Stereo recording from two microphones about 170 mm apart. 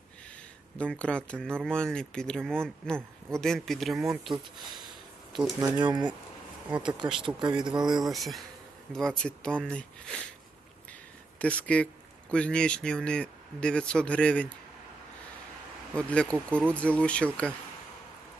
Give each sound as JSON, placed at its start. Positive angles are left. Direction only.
{"t": 0.8, "sound": "speech", "side_deg": 5}
{"t": 5.5, "sound": "speech", "side_deg": -25}
{"t": 7.3, "sound": "speech", "side_deg": -25}
{"t": 8.1, "sound": "speech", "side_deg": 0}
{"t": 11.3, "sound": "speech", "side_deg": 10}
{"t": 16.0, "sound": "speech", "side_deg": 5}